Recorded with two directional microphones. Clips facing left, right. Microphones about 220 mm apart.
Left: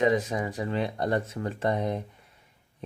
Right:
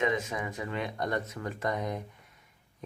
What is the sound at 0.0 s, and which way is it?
Speech, 35° left (ahead or behind).